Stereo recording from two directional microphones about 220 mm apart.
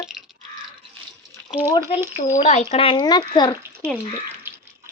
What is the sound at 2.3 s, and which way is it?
Speech, 30° left (ahead or behind).